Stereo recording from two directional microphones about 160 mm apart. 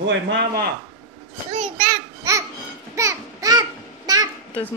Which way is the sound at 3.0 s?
20° right (ahead or behind).